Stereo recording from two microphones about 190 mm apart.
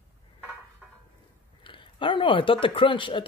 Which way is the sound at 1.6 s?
25° left (ahead or behind).